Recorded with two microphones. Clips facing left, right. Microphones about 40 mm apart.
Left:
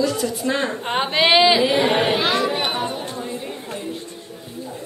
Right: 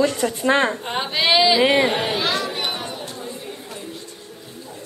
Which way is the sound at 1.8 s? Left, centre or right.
Centre.